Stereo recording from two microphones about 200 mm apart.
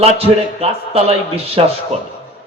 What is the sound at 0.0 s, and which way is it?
A man's voice, 30° right (ahead or behind).